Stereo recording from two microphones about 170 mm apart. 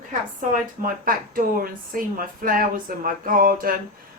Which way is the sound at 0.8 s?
55° right (ahead or behind).